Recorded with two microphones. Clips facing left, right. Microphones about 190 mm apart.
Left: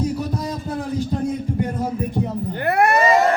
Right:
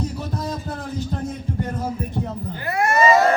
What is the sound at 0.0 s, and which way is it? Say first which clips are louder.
Heart sounds: left 4 dB; 10° left (ahead or behind).